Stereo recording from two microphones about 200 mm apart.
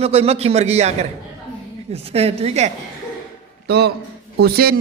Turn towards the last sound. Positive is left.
turn(degrees=-50)  # may be behind; listen again after turning